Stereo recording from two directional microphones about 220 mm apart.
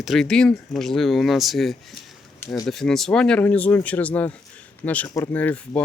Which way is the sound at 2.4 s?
15° left (ahead or behind).